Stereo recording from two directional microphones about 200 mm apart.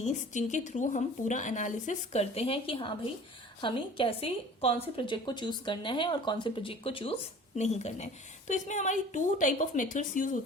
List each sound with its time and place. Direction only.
0.0 s a woman's voice: 35° left (ahead or behind)